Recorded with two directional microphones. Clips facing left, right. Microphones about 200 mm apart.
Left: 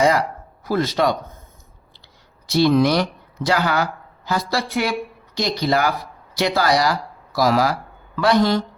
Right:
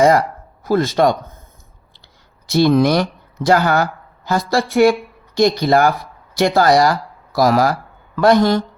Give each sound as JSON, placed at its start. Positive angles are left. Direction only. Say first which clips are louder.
{"t": 0.0, "sound": "speech", "louder": "right 5 dB", "side_deg": -50}
{"t": 2.5, "sound": "speech", "louder": "right 3 dB", "side_deg": -50}